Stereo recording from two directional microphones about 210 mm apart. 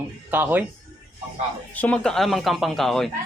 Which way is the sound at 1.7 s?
5° left (ahead or behind).